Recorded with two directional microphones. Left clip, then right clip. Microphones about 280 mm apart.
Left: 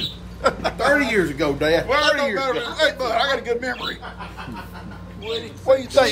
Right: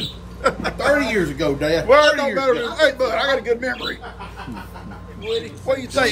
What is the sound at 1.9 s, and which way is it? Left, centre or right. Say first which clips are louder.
Speech: right 5 dB; centre.